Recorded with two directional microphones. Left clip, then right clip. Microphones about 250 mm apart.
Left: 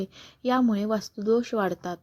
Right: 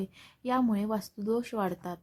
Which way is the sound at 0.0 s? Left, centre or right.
Centre.